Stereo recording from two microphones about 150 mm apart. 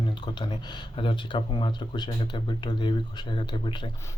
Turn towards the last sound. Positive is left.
turn(degrees=30)  # may be behind; listen again after turning